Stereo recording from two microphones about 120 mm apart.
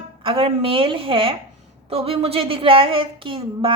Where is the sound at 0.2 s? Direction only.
50° right (ahead or behind).